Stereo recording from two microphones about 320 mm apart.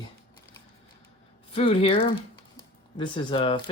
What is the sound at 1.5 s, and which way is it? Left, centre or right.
Speech, centre.